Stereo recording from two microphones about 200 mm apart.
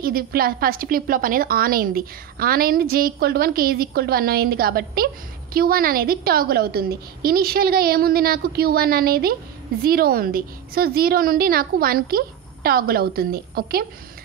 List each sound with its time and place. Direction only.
0.0 s a woman's voice: 50° right (ahead or behind)